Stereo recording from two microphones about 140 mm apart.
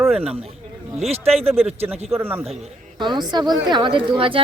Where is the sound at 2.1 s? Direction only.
15° right (ahead or behind).